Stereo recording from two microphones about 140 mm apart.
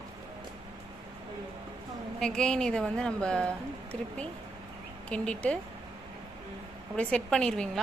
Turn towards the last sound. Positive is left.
turn(degrees=5)  # may be behind; listen again after turning